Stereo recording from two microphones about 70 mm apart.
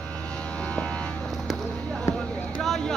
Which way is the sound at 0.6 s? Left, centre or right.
Centre.